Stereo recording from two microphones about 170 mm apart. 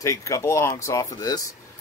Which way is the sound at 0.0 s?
20° left (ahead or behind).